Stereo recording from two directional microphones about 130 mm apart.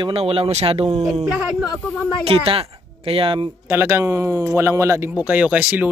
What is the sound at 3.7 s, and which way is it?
Speech, 20° right (ahead or behind).